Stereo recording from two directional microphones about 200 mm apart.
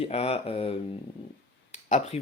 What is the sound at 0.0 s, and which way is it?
Speech, 30° left (ahead or behind).